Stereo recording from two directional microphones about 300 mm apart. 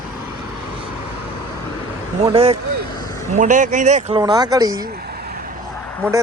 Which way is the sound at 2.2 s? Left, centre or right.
Centre.